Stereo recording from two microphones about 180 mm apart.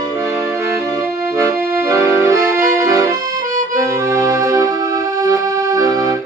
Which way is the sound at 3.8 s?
15° right (ahead or behind).